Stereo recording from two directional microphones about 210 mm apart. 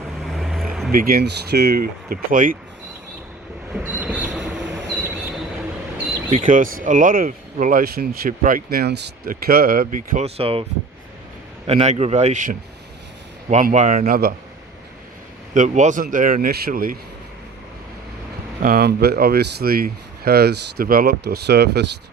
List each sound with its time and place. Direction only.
0.3 s vehicle: centre (ahead or behind)
0.9 s speech: 45° right (ahead or behind)
3.8 s train: 5° right (ahead or behind)
6.4 s speech: 40° right (ahead or behind)
10.2 s a man's voice: 30° right (ahead or behind)
15.5 s a man's voice: 35° right (ahead or behind)
18.6 s speech: 45° right (ahead or behind)